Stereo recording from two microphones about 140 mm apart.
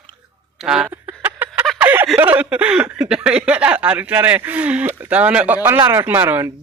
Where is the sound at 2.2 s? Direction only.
10° right (ahead or behind).